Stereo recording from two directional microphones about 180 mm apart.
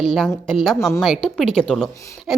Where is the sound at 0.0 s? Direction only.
Centre (ahead or behind).